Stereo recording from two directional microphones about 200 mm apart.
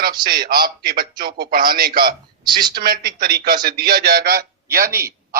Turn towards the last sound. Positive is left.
turn(degrees=-50)  # may be behind; listen again after turning